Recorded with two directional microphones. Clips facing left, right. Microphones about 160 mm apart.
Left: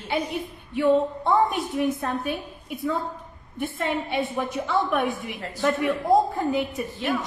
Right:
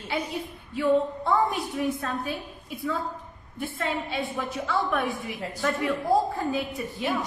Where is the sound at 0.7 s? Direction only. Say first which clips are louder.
Left 3 dB; 20° left (ahead or behind).